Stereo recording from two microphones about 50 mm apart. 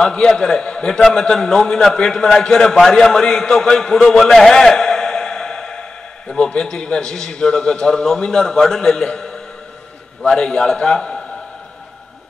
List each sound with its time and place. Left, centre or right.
0.0 s a man's voice: centre